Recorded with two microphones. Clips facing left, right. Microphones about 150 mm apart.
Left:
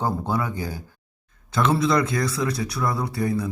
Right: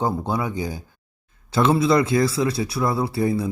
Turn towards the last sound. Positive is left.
turn(degrees=-25)  # may be behind; listen again after turning